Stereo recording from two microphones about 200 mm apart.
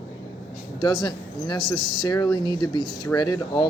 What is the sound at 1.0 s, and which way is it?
Speech, 20° left (ahead or behind).